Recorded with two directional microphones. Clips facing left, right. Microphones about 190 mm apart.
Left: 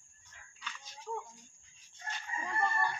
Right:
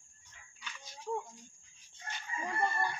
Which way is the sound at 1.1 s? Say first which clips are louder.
Right 3 dB; 25° right (ahead or behind).